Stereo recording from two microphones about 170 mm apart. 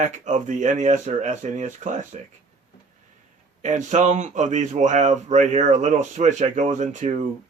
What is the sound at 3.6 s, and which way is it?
Speech, 45° right (ahead or behind).